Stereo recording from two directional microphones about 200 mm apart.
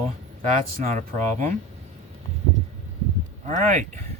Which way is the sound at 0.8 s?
35° right (ahead or behind).